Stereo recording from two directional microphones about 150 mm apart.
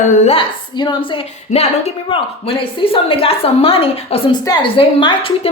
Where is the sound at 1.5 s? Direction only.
50° left (ahead or behind).